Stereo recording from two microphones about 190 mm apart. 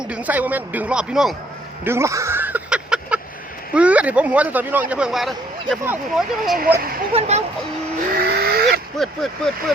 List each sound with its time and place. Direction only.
0.0 s speech: 5° right (ahead or behind)
1.8 s a sound: 15° right (ahead or behind)
3.8 s speech: 5° right (ahead or behind)
7.1 s speech: 35° right (ahead or behind)
8.1 s a sound: 55° right (ahead or behind)
9.0 s speech: centre (ahead or behind)